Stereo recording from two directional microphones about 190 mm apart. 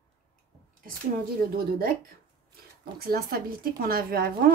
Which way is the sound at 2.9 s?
55° right (ahead or behind).